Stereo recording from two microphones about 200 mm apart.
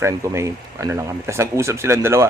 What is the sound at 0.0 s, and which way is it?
Speech, 15° right (ahead or behind).